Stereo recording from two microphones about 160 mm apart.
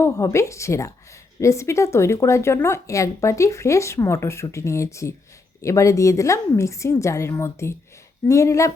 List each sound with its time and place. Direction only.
0.0 s a woman's voice: 20° left (ahead or behind)